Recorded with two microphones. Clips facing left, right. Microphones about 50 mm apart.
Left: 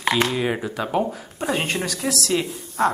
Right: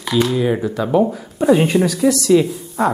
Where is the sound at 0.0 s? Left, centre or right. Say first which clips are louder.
Right 3 dB; left.